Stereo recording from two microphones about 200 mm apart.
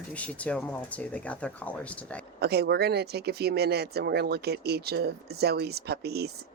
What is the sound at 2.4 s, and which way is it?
Speech, 55° right (ahead or behind).